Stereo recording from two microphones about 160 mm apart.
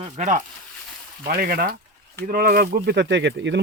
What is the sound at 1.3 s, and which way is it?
Speech, 65° right (ahead or behind).